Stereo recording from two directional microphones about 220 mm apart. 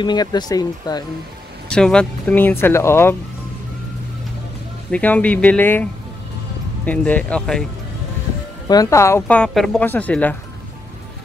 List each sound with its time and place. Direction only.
0.0 s speech: 20° left (ahead or behind)
1.7 s speech: 5° left (ahead or behind)
4.9 s speech: 5° left (ahead or behind)
8.6 s speech: 15° left (ahead or behind)